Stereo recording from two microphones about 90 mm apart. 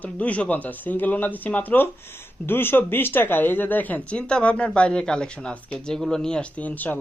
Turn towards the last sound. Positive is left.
turn(degrees=15)  # may be behind; listen again after turning